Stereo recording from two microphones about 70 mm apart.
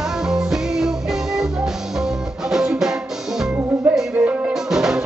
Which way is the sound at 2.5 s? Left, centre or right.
Centre.